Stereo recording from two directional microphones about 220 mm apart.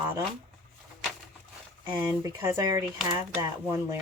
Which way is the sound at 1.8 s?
10° right (ahead or behind).